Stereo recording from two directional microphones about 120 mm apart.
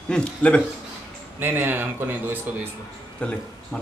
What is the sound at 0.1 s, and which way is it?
Speech, 10° left (ahead or behind).